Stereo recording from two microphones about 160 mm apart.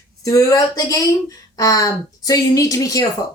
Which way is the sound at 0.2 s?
20° left (ahead or behind).